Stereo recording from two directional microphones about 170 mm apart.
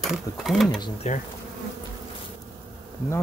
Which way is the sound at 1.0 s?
40° left (ahead or behind).